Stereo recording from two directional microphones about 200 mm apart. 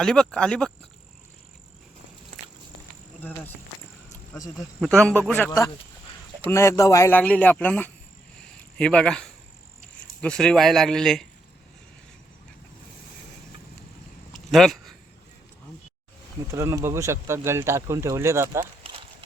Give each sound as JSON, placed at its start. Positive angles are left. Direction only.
{"t": 0.0, "sound": "speech", "side_deg": 5}
{"t": 3.2, "sound": "speech", "side_deg": 10}
{"t": 4.5, "sound": "speech", "side_deg": 0}
{"t": 14.5, "sound": "speech", "side_deg": 0}
{"t": 16.5, "sound": "speech", "side_deg": -15}